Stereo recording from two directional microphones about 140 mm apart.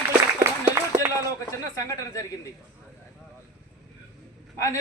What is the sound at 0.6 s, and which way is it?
Run, 15° right (ahead or behind).